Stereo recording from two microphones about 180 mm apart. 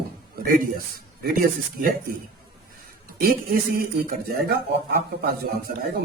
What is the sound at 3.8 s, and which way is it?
Speech, 55° right (ahead or behind).